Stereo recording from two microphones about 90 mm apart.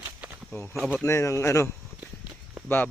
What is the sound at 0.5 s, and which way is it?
Speech, 10° left (ahead or behind).